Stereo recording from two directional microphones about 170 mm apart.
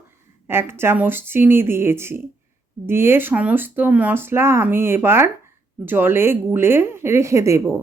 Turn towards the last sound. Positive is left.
turn(degrees=-15)  # may be behind; listen again after turning